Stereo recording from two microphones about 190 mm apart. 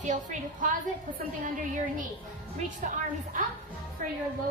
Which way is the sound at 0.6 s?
45° right (ahead or behind).